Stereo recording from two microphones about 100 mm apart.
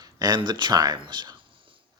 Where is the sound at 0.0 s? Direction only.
40° right (ahead or behind).